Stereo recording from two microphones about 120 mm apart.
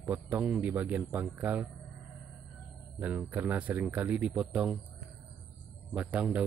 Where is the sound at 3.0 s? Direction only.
15° right (ahead or behind).